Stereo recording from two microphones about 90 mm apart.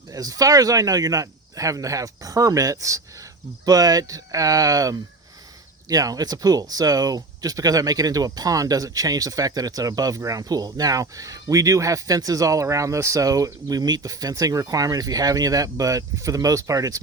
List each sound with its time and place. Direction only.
0.1 s speech: 40° right (ahead or behind)